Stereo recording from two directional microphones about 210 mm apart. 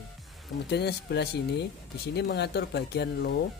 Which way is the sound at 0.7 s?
50° left (ahead or behind).